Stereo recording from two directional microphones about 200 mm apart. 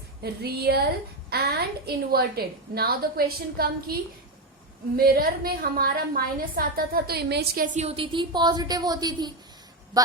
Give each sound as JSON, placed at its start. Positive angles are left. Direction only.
{"t": 0.2, "sound": "a woman's voice", "side_deg": -55}
{"t": 4.9, "sound": "a woman's voice", "side_deg": -45}